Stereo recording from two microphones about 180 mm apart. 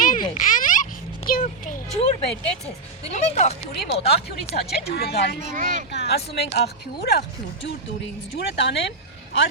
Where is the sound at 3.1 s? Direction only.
40° left (ahead or behind).